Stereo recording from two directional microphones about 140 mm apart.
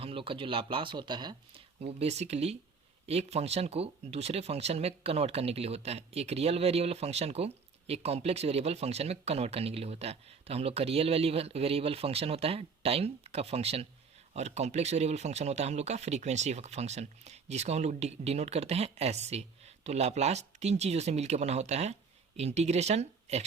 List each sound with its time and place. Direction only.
0.0 s speech: 40° right (ahead or behind)
1.8 s speech: 45° right (ahead or behind)